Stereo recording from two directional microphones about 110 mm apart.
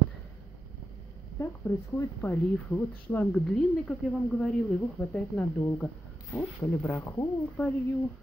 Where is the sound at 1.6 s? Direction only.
20° left (ahead or behind).